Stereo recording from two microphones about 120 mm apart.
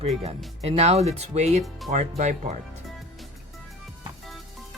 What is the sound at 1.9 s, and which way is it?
Speech, 85° right.